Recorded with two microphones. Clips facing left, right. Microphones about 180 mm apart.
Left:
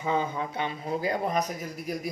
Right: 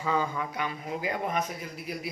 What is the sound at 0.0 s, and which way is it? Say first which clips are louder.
A man's voice: left 1 dB; 20° left (ahead or behind).